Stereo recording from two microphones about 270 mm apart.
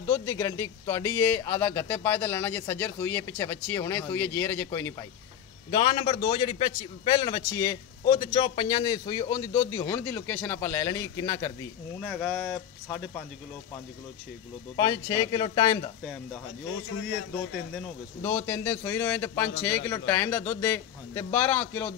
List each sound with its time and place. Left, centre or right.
0.3 s a man's voice: centre
12.0 s speech: centre
14.8 s a man's voice: centre
18.2 s a man's voice: centre